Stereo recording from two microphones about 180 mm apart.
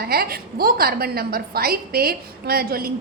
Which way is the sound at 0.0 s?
55° right (ahead or behind).